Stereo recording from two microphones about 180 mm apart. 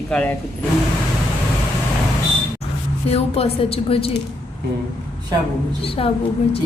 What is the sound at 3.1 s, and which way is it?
A woman's voice, 35° left (ahead or behind).